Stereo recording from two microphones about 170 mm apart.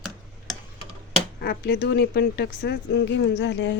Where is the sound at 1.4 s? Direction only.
75° left (ahead or behind).